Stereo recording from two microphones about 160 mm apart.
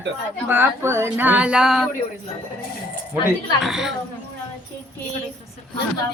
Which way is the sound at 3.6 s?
5° right (ahead or behind).